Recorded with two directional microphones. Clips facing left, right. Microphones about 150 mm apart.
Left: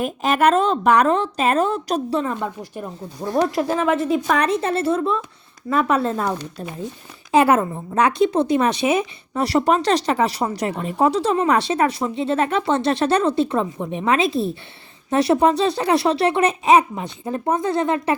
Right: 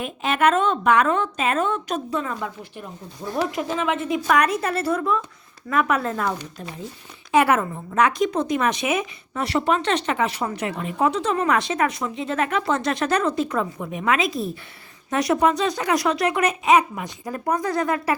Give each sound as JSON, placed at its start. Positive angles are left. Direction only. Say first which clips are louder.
{"t": 0.0, "sound": "a woman's voice", "louder": "left 3 dB", "side_deg": 40}